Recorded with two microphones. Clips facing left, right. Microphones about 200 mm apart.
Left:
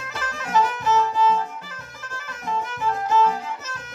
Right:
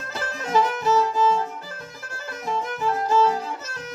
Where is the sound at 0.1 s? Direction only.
35° right (ahead or behind).